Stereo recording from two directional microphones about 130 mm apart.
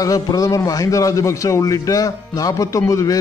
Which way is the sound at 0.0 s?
25° left (ahead or behind).